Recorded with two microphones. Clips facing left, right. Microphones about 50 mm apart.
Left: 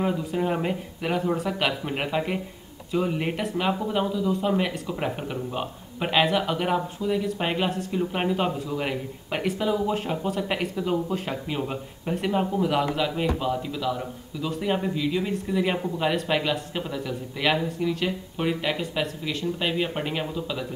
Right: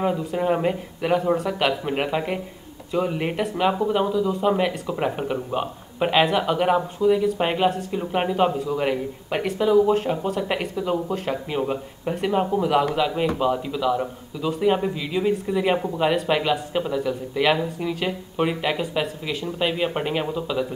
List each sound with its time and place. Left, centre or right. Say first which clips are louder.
0.0 s speech: right 3 dB; centre
12.3 s a man's voice: right 3 dB; centre
12.6 s a man's voice: right 4 dB; centre